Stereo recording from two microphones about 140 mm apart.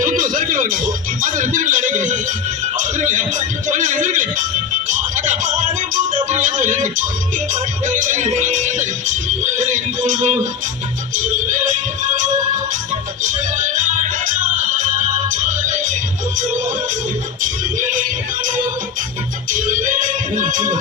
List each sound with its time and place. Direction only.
0.0 s speech: 75° right (ahead or behind)
2.7 s music: 65° right (ahead or behind)
17.4 s speech: 70° right (ahead or behind)